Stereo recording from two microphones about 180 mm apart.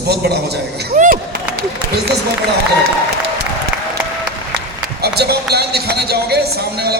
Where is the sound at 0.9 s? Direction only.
50° right (ahead or behind).